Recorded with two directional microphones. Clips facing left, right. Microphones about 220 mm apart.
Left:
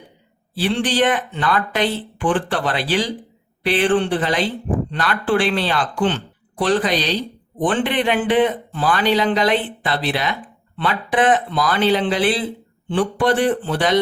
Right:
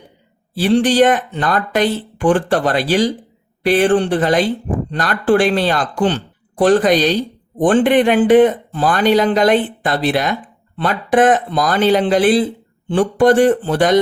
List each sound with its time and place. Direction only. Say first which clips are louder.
0.5 s speech: right 7 dB; 45° right (ahead or behind)